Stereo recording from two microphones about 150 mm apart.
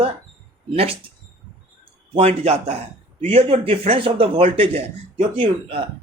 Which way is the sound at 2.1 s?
40° right (ahead or behind).